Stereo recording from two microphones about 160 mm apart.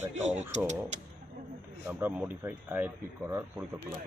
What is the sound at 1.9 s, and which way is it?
Speech, 15° right (ahead or behind).